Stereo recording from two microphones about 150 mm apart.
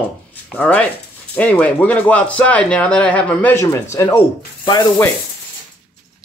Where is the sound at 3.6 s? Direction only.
20° left (ahead or behind).